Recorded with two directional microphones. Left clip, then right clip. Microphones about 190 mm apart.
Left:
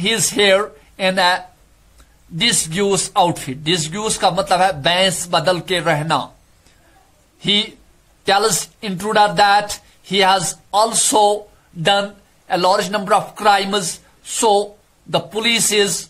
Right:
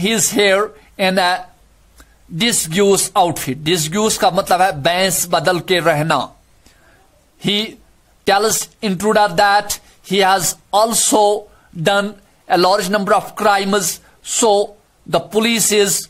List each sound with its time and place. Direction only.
0.0 s speech: 45° right (ahead or behind)
7.3 s a man's voice: 45° right (ahead or behind)